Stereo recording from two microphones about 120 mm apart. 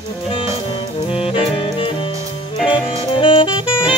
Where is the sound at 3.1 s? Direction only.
45° left (ahead or behind).